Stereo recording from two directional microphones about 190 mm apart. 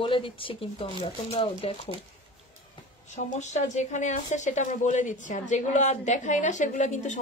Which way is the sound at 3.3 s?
35° left (ahead or behind).